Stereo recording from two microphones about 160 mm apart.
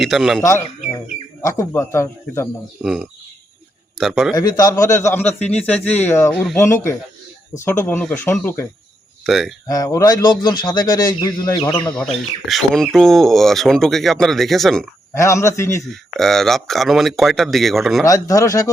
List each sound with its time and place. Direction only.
0.0 s speech: centre (ahead or behind)
1.4 s speech: 20° left (ahead or behind)
2.8 s a man's voice: 5° right (ahead or behind)
4.4 s speech: 20° left (ahead or behind)
9.2 s speech: centre (ahead or behind)
9.6 s a man's voice: 20° left (ahead or behind)
12.5 s speech: centre (ahead or behind)
15.1 s speech: 15° left (ahead or behind)
15.9 s speech: centre (ahead or behind)
18.0 s a man's voice: 20° left (ahead or behind)